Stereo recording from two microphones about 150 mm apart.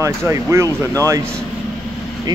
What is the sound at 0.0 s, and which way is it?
A man's voice, 20° right (ahead or behind).